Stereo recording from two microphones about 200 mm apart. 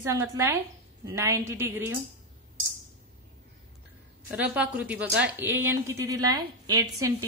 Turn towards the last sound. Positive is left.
turn(degrees=-15)  # may be behind; listen again after turning